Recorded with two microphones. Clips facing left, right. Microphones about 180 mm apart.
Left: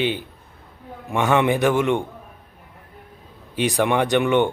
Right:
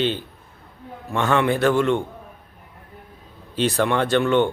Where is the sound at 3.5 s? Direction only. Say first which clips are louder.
Left 1 dB; 15° left (ahead or behind).